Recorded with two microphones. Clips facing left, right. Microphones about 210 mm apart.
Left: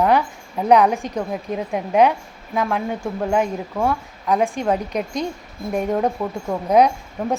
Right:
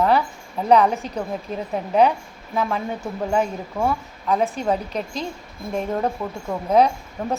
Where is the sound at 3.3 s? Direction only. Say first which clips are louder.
Left 1 dB; 5° left (ahead or behind).